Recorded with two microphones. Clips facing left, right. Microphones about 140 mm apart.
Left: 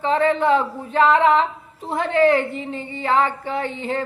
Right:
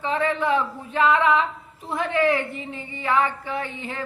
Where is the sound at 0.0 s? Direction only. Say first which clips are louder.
Left 5 dB; 35° left (ahead or behind).